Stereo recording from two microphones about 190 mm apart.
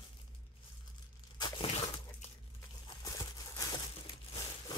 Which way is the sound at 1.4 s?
25° left (ahead or behind).